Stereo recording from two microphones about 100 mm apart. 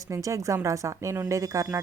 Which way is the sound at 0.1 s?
35° right (ahead or behind).